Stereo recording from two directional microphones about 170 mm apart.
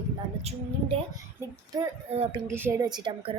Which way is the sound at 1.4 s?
15° right (ahead or behind).